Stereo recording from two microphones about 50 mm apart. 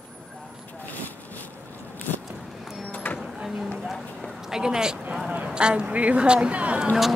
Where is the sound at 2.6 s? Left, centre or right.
Centre.